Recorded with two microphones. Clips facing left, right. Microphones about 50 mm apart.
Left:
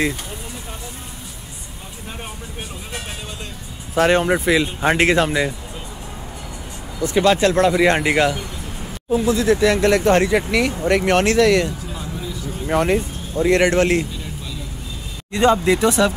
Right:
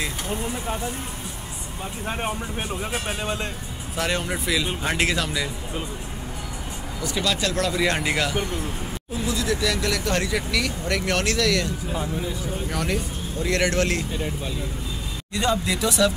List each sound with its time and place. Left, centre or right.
3.9 s speech: left
7.0 s speech: left
15.3 s speech: left